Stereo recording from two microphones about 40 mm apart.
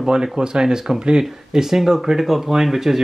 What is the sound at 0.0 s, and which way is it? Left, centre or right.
Speech, centre.